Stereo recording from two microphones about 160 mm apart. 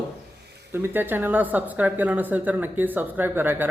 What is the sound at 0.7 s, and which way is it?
Speech, 15° right (ahead or behind).